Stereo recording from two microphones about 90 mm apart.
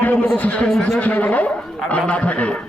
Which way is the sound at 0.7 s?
5° left (ahead or behind).